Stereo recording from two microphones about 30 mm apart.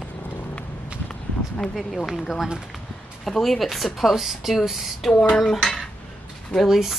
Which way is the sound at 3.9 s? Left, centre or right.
Centre.